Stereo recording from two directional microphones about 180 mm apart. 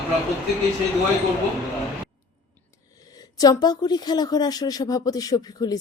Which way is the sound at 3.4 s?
20° left (ahead or behind).